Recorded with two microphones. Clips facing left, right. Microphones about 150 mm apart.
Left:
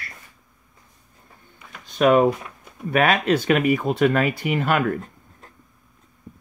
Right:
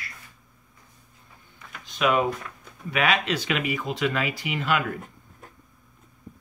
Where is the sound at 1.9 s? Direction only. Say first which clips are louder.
Left 7 dB; 45° left (ahead or behind).